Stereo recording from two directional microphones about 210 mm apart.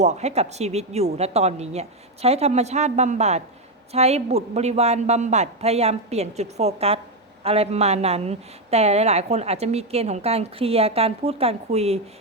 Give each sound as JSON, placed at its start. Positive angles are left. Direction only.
{"t": 0.0, "sound": "a woman's voice", "side_deg": -30}